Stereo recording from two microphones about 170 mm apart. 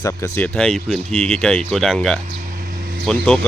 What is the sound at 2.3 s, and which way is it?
Vehicle, 55° right (ahead or behind).